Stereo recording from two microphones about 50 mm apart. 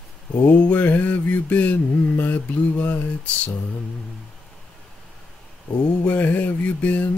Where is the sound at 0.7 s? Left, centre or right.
Left.